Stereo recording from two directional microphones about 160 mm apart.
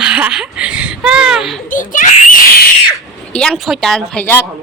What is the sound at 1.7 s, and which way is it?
Speech, 55° left (ahead or behind).